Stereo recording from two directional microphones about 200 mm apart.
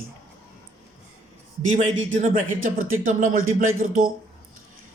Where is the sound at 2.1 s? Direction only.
40° right (ahead or behind).